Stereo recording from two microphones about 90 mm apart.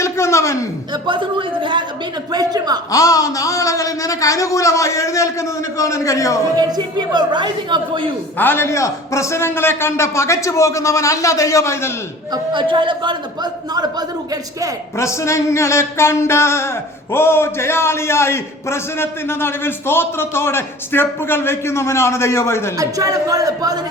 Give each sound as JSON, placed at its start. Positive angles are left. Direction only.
{"t": 0.0, "sound": "a sound", "side_deg": 35}
{"t": 1.0, "sound": "a man's voice", "side_deg": -65}
{"t": 2.3, "sound": "a sound", "side_deg": -45}
{"t": 2.9, "sound": "a man's voice", "side_deg": 40}
{"t": 6.6, "sound": "a man's voice", "side_deg": -50}
{"t": 8.4, "sound": "a man's voice", "side_deg": 25}
{"t": 12.3, "sound": "a man's voice", "side_deg": -65}
{"t": 14.9, "sound": "a sound", "side_deg": 35}
{"t": 22.8, "sound": "speech", "side_deg": -40}